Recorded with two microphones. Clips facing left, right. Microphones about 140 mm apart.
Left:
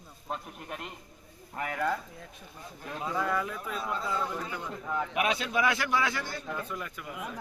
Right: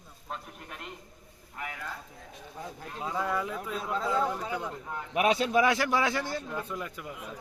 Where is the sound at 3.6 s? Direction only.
90° right.